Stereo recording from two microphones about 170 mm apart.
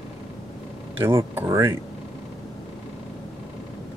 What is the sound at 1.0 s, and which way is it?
Speech, 10° right (ahead or behind).